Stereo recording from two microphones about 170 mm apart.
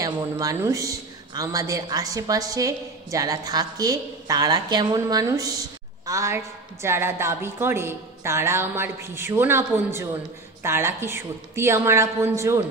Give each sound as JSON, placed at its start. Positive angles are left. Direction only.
{"t": 0.0, "sound": "a woman's voice", "side_deg": -20}